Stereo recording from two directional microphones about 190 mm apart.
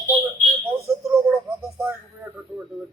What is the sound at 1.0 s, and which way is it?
Speech, 5° right (ahead or behind).